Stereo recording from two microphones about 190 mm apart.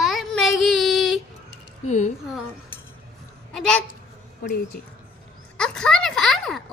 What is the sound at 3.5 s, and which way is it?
Speech, centre (ahead or behind).